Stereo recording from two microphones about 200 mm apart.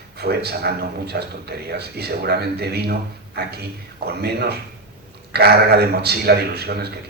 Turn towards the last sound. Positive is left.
turn(degrees=-55)  # may be behind; listen again after turning